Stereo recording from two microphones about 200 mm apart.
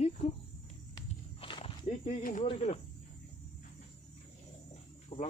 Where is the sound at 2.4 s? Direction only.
30° left (ahead or behind).